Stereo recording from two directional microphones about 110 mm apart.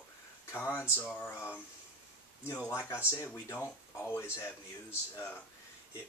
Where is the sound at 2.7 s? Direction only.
25° left (ahead or behind).